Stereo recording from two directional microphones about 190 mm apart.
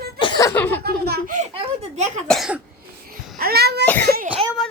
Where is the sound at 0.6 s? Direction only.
10° left (ahead or behind).